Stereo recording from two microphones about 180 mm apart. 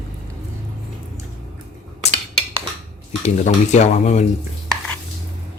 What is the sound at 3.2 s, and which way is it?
Speech, 40° left (ahead or behind).